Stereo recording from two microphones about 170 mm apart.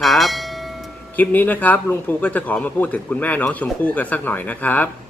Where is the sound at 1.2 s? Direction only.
10° left (ahead or behind).